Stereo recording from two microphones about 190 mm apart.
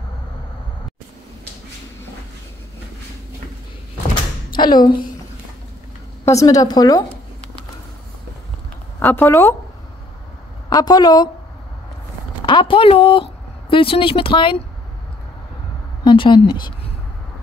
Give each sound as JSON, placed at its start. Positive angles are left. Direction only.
{"t": 4.6, "sound": "a woman's voice", "side_deg": 20}
{"t": 6.2, "sound": "a woman's voice", "side_deg": 15}
{"t": 9.0, "sound": "speech", "side_deg": 15}
{"t": 10.7, "sound": "a woman's voice", "side_deg": 20}
{"t": 12.4, "sound": "speech", "side_deg": 25}
{"t": 16.0, "sound": "a woman's voice", "side_deg": 20}